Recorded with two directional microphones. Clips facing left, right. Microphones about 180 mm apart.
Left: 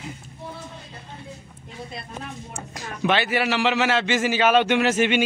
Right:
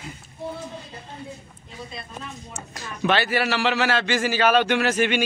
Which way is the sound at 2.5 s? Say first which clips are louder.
Left 2 dB; 15° left (ahead or behind).